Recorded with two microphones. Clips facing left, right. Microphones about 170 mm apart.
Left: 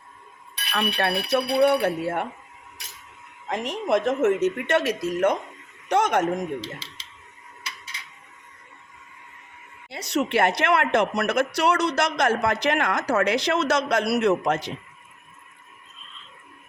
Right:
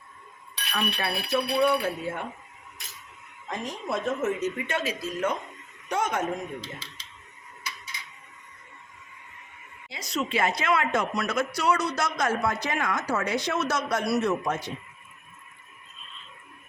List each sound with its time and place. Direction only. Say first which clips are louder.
0.7 s a woman's voice: left 5 dB; 65° left (ahead or behind)
3.5 s a woman's voice: left 8 dB; 80° left
9.9 s a woman's voice: left 6 dB; 65° left (ahead or behind); by 14.7 s 85° left